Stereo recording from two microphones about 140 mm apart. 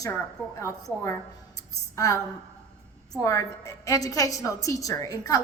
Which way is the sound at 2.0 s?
25° left (ahead or behind).